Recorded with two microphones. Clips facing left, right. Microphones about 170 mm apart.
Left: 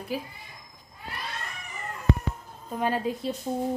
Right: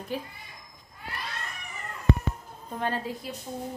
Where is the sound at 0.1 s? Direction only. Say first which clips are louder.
Left 1 dB; 5° left (ahead or behind).